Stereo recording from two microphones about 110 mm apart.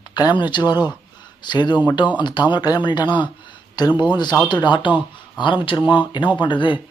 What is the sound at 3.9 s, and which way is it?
Speech, 15° right (ahead or behind).